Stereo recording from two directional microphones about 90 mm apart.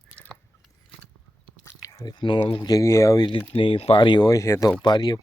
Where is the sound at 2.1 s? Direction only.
65° left (ahead or behind).